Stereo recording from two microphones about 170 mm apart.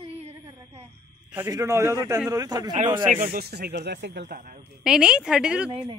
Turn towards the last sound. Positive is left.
turn(degrees=-5)  # may be behind; listen again after turning